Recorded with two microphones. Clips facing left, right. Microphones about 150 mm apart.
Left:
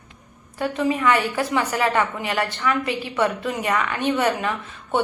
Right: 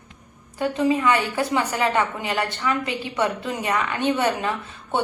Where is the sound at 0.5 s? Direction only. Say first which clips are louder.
Right 2 dB; 25° right (ahead or behind).